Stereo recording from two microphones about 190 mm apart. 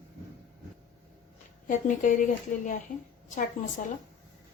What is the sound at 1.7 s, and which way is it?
Speech, 40° left (ahead or behind).